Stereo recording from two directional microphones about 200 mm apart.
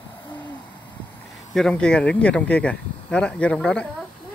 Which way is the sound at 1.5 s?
5° left (ahead or behind).